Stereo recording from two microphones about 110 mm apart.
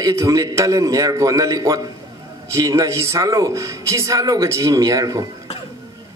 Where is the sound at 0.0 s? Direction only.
30° right (ahead or behind).